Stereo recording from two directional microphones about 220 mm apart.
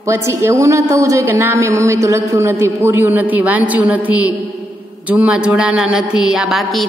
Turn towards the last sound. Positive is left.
turn(degrees=0)  # may be behind; listen again after turning